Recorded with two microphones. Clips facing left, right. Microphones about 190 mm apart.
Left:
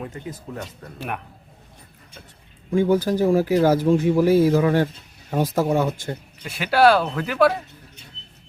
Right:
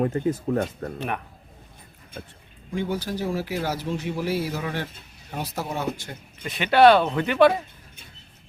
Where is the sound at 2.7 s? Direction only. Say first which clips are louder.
Left 9 dB; 50° left (ahead or behind).